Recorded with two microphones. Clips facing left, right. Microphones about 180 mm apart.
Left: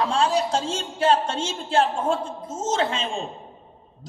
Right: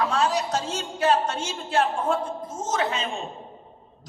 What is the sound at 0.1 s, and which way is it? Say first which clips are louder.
A man's voice: left 2 dB; 30° left (ahead or behind).